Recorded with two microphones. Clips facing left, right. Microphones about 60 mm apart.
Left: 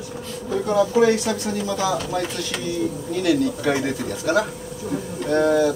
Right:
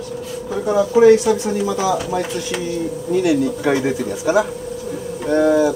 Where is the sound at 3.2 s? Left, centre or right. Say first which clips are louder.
Even; centre.